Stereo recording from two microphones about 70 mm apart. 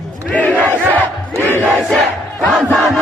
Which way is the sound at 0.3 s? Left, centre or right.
Left.